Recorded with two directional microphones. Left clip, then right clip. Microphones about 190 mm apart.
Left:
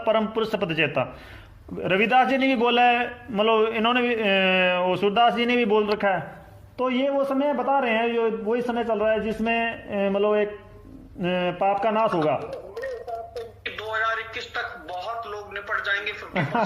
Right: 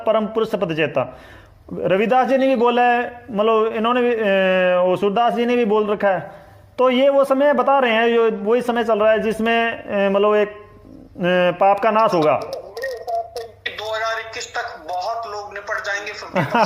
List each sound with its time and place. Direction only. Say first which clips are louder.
0.0 s a man's voice: right 4 dB; 40° right (ahead or behind)
12.7 s a sound: right 9 dB; 5° left (ahead or behind)
15.9 s a woman's voice: right 1 dB; 5° left (ahead or behind)
16.3 s a man's voice: right 8 dB; 40° right (ahead or behind)